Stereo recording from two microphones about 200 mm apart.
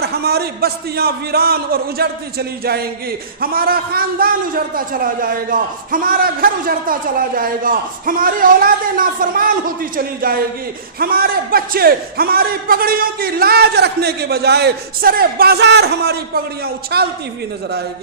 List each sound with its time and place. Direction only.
0.0 s a man's voice: 50° right (ahead or behind)
3.4 s a man's voice: 50° right (ahead or behind)